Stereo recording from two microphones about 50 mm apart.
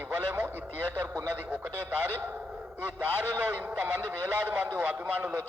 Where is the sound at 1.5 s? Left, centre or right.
Right.